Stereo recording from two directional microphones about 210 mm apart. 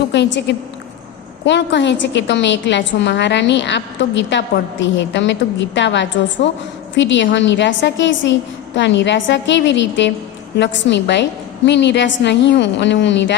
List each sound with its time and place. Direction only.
0.1 s a woman's voice: 55° left (ahead or behind)
1.5 s a woman's voice: 55° left (ahead or behind)